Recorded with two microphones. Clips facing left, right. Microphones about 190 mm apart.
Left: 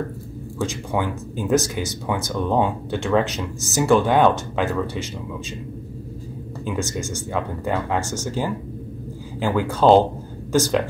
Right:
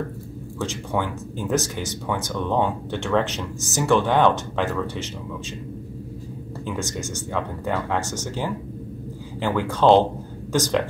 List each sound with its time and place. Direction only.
0.6 s speech: 10° left (ahead or behind)
6.6 s speech: 10° left (ahead or behind)